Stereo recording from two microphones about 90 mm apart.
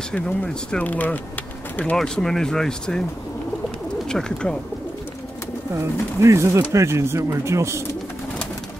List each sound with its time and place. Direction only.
0.1 s speech: 15° left (ahead or behind)
2.0 s speech: 5° left (ahead or behind)
4.1 s speech: 10° left (ahead or behind)
5.8 s speech: 30° right (ahead or behind)